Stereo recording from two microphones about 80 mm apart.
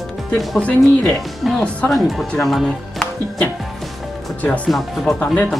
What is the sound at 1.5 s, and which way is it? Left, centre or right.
Speech, centre.